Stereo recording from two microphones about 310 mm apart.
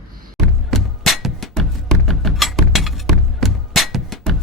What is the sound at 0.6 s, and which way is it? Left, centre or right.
Music, centre.